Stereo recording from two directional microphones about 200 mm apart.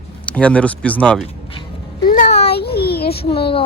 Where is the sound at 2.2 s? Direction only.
35° left (ahead or behind).